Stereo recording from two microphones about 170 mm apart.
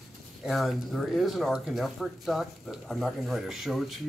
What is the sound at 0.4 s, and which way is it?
Speech, centre (ahead or behind).